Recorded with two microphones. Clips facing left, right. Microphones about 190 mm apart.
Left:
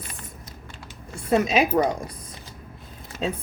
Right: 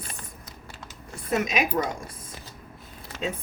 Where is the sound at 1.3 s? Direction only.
30° left (ahead or behind).